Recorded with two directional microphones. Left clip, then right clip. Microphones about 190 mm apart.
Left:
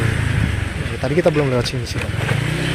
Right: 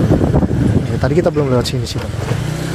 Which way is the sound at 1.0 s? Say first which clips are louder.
Right 1 dB; 25° right (ahead or behind).